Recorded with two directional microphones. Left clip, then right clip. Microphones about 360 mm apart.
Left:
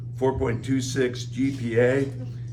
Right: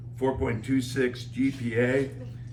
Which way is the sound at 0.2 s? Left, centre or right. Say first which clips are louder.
Left 3 dB; centre.